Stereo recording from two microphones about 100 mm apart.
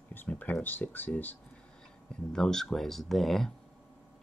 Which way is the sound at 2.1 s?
5° left (ahead or behind).